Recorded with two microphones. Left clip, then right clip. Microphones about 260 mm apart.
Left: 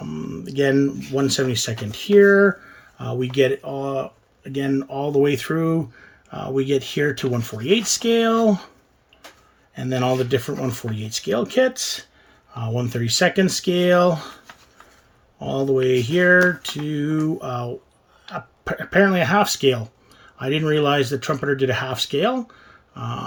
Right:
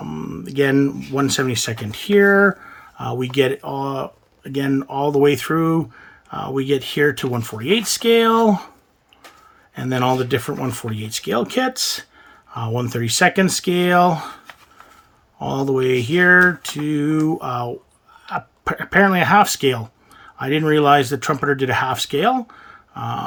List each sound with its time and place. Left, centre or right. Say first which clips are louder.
0.0 s speech: right 2 dB; centre
9.7 s speech: right 2 dB; centre
15.4 s speech: right 1 dB; centre